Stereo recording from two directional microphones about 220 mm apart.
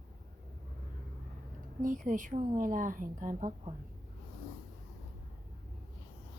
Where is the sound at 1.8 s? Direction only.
35° right (ahead or behind).